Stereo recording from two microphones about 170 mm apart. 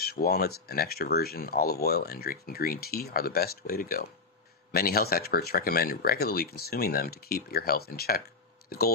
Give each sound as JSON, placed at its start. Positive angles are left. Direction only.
{"t": 0.0, "sound": "speech", "side_deg": 65}